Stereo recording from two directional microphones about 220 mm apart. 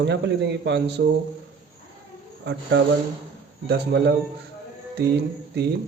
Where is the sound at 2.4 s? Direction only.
50° right (ahead or behind).